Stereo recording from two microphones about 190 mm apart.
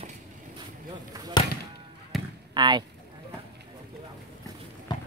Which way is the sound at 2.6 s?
20° right (ahead or behind).